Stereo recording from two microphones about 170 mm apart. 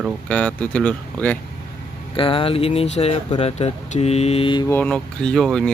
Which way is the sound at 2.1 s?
30° left (ahead or behind).